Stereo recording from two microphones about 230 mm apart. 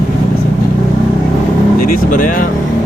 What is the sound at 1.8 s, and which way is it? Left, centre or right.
Speech, left.